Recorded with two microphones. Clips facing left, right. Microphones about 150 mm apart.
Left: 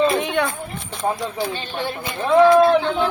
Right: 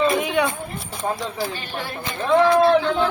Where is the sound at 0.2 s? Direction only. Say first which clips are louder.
Even; 5° right (ahead or behind).